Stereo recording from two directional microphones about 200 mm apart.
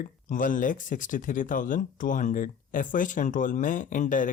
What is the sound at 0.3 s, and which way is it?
Speech, 40° left (ahead or behind).